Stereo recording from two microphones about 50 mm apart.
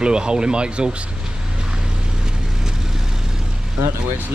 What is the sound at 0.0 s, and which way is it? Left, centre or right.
Speech, centre.